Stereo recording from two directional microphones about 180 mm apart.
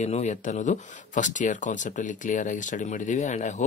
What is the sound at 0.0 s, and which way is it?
Speech, 40° left (ahead or behind).